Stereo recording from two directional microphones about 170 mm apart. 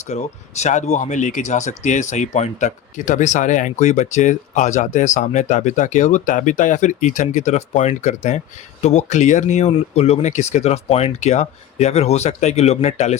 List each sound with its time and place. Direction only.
0.1 s speech: 40° left (ahead or behind)